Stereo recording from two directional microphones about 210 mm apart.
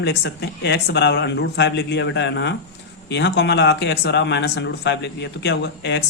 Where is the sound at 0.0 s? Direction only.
55° left (ahead or behind).